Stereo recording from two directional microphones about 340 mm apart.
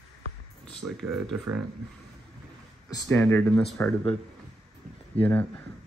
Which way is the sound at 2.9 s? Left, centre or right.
Centre.